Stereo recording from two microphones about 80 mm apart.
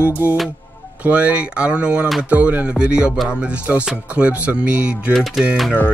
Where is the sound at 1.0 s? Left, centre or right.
Centre.